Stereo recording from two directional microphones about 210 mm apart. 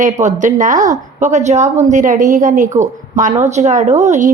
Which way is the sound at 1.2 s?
35° right (ahead or behind).